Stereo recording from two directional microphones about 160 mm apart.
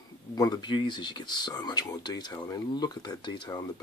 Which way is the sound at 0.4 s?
25° left (ahead or behind).